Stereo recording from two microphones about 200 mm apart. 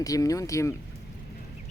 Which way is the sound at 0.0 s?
15° left (ahead or behind).